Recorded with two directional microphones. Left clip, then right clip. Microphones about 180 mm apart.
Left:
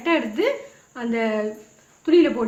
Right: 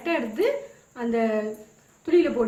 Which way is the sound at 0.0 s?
50° left (ahead or behind).